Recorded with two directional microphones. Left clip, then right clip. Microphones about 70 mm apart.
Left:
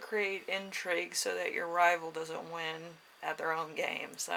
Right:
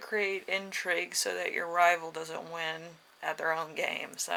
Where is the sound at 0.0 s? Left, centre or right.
Right.